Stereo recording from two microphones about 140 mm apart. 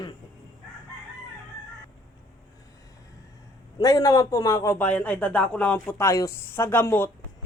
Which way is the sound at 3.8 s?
25° left (ahead or behind).